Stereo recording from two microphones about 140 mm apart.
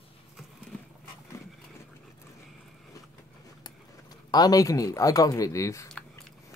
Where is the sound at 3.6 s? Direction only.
30° left (ahead or behind).